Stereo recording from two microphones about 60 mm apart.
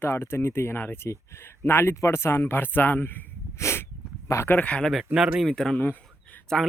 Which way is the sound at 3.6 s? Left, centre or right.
Left.